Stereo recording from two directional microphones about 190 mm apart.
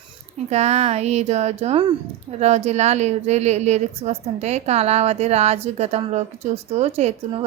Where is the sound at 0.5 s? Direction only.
35° right (ahead or behind).